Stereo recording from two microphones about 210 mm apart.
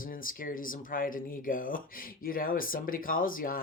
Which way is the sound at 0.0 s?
40° left (ahead or behind).